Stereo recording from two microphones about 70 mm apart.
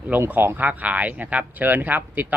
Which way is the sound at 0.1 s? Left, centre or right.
Right.